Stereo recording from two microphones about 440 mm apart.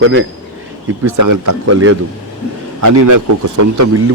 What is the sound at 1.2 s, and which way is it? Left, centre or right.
A man's voice, right.